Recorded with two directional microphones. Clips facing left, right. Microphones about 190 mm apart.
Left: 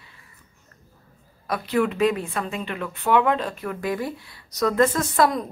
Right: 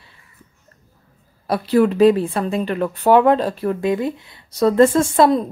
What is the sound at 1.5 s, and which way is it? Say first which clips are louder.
Speech: right 7 dB; 35° right (ahead or behind).